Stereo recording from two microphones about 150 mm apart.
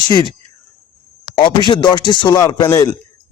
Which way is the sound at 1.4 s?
30° left (ahead or behind).